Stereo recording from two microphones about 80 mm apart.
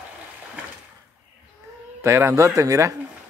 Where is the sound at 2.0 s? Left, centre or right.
Right.